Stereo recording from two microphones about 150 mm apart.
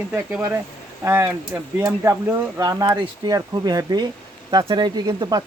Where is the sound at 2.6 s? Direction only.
25° right (ahead or behind).